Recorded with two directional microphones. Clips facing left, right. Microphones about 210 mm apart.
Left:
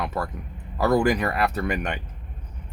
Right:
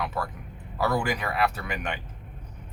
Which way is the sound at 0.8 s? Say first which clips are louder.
Left 6 dB; 45° left (ahead or behind).